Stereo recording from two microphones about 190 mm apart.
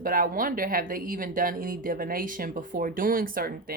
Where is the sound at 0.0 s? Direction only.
45° right (ahead or behind).